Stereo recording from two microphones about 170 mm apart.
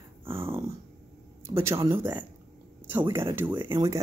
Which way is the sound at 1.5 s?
15° right (ahead or behind).